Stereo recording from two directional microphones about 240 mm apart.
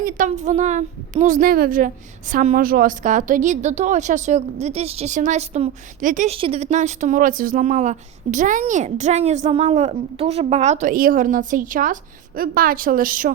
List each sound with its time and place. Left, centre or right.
0.0 s a woman's voice: right